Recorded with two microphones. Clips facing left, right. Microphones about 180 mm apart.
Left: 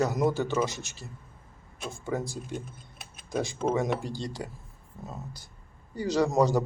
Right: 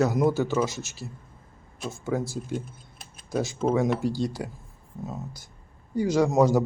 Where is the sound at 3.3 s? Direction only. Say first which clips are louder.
Right 3 dB; 5° right (ahead or behind).